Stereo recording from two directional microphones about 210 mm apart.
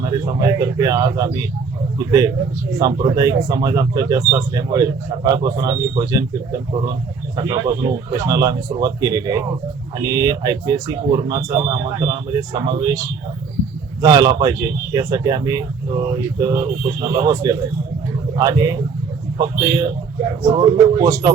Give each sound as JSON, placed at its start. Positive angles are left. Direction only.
{"t": 0.0, "sound": "speech", "side_deg": -20}